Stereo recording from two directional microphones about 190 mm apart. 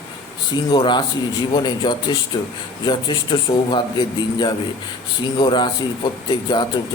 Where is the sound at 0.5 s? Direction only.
20° left (ahead or behind).